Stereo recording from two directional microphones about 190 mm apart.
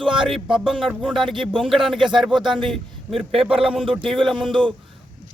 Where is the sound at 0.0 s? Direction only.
25° right (ahead or behind).